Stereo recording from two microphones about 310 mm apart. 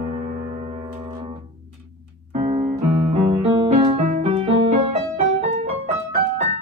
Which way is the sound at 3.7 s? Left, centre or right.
Centre.